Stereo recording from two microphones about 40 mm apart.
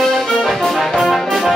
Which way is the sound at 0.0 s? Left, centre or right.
Centre.